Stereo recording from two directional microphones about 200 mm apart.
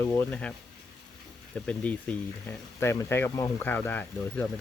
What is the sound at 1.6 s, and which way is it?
Speech, 5° left (ahead or behind).